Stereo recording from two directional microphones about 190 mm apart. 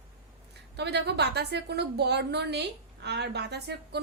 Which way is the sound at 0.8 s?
60° right (ahead or behind).